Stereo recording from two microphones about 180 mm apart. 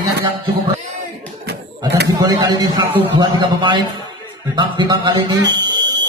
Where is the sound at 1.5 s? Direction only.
70° right (ahead or behind).